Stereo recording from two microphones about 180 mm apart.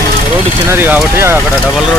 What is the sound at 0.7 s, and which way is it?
Speech, 10° right (ahead or behind).